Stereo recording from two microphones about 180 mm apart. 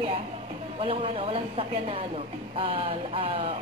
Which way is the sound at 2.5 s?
30° right (ahead or behind).